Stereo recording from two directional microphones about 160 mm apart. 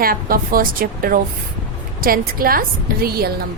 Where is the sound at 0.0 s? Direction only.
65° right (ahead or behind).